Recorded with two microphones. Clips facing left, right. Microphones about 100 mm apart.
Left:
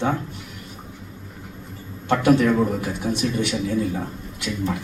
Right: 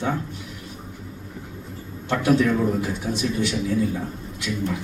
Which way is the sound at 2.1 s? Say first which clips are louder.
Left 2 dB; 55° left (ahead or behind).